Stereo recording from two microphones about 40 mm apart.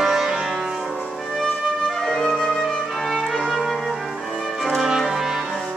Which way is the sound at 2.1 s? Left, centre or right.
Centre.